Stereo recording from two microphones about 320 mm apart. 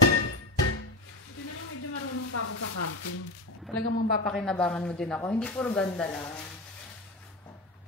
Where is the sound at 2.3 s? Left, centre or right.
Left.